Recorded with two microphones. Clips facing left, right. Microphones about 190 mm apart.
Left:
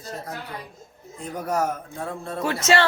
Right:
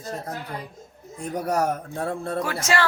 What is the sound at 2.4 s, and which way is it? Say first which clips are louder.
Speech: left 5 dB; 25° left (ahead or behind).